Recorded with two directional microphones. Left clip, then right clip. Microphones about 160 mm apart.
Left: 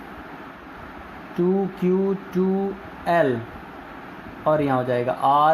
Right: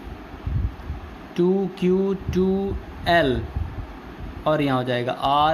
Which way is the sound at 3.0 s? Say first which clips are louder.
Right 1 dB; 30° right (ahead or behind).